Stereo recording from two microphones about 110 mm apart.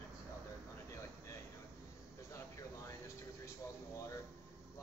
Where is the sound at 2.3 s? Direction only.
25° left (ahead or behind).